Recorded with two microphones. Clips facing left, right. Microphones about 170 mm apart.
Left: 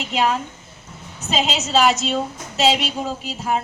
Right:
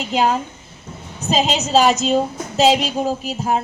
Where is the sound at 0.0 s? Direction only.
30° right (ahead or behind).